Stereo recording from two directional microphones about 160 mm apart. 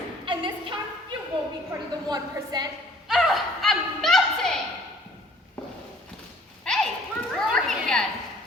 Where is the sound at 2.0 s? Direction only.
25° right (ahead or behind).